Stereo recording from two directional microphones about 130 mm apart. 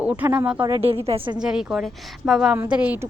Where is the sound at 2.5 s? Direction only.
15° right (ahead or behind).